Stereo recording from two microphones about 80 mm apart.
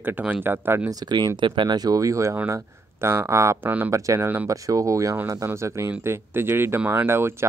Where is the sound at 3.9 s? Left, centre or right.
Right.